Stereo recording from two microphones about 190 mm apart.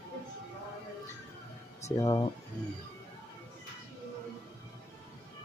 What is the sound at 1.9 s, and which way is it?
Speech, 20° left (ahead or behind).